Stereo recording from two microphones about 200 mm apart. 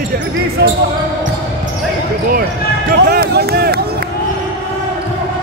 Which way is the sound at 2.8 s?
50° right (ahead or behind).